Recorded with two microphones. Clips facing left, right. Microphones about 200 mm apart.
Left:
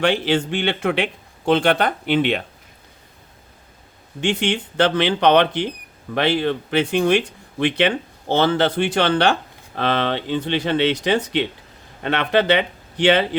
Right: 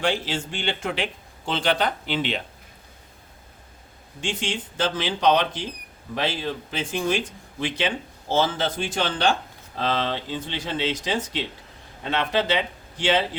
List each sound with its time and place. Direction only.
0.0 s speech: 65° left (ahead or behind)
4.2 s speech: 65° left (ahead or behind)